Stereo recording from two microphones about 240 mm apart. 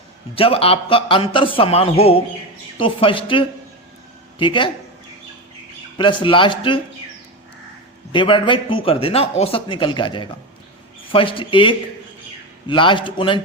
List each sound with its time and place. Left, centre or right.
0.3 s speech: left
6.0 s speech: left
8.1 s speech: left